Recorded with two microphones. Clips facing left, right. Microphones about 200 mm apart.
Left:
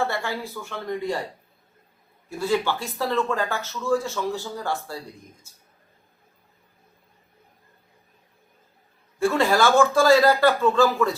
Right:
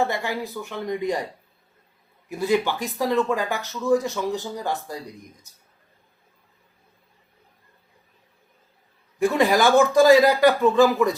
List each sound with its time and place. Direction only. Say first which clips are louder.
0.0 s speech: right 2 dB; 15° right (ahead or behind)
2.3 s speech: right 2 dB; 15° right (ahead or behind)
9.1 s speech: right 1 dB; 15° right (ahead or behind)